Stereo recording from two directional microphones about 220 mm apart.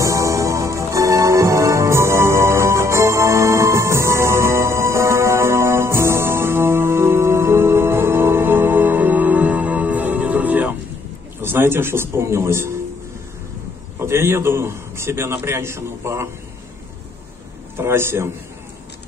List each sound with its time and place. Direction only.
0.0 s music: 15° right (ahead or behind)
11.4 s a man's voice: 10° right (ahead or behind)
13.9 s a man's voice: 10° right (ahead or behind)
17.7 s a man's voice: 10° right (ahead or behind)